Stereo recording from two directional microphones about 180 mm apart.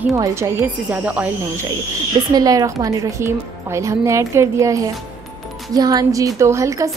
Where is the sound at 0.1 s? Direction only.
15° right (ahead or behind).